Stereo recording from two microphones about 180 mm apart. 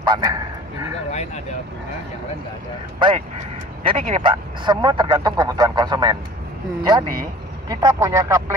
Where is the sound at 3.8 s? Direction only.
35° right (ahead or behind).